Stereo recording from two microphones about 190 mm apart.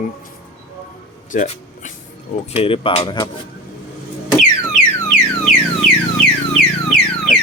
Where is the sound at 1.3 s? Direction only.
40° left (ahead or behind).